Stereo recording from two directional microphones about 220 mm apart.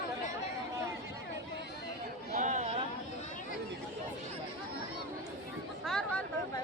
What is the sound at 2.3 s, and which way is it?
Chatter, 30° right (ahead or behind).